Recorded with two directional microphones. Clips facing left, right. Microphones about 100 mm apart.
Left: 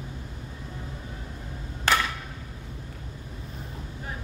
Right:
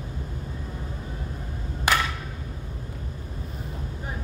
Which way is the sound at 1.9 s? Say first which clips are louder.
Even; 15° right (ahead or behind).